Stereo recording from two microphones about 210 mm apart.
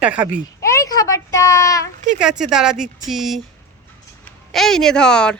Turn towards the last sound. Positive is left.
turn(degrees=5)  # may be behind; listen again after turning